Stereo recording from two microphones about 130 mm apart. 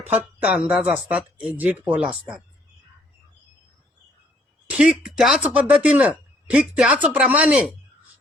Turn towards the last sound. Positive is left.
turn(degrees=-10)  # may be behind; listen again after turning